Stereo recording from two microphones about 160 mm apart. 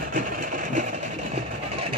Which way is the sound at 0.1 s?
60° right (ahead or behind).